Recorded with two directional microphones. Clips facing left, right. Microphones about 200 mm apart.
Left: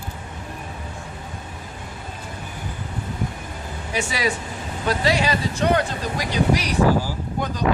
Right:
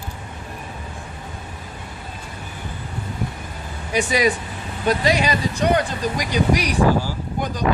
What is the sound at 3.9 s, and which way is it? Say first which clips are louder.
Speech: right 5 dB; 15° right (ahead or behind).